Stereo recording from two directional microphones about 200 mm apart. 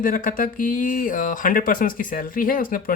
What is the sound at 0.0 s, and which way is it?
Speech, 45° left (ahead or behind).